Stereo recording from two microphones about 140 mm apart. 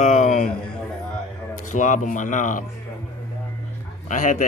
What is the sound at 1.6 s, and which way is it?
Speech, 60° left (ahead or behind).